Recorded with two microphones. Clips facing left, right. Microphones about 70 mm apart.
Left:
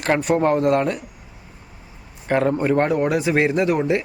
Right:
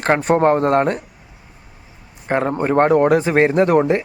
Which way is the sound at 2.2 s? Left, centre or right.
Right.